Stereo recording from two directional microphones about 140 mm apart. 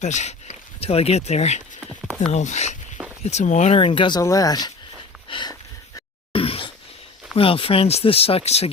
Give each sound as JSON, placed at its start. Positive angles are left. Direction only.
{"t": 0.0, "sound": "speech", "side_deg": 55}
{"t": 3.8, "sound": "speech", "side_deg": 35}
{"t": 4.2, "sound": "speech", "side_deg": 25}
{"t": 5.3, "sound": "dog", "side_deg": 35}
{"t": 6.3, "sound": "a sound", "side_deg": 40}
{"t": 7.3, "sound": "speech", "side_deg": 40}